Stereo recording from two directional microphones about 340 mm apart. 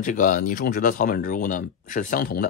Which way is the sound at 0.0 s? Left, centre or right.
Left.